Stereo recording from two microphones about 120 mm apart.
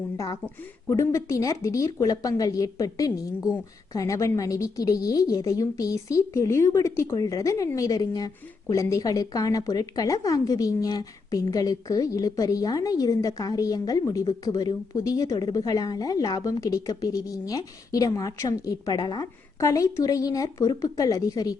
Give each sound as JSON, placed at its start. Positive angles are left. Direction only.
{"t": 0.9, "sound": "a woman's voice", "side_deg": 25}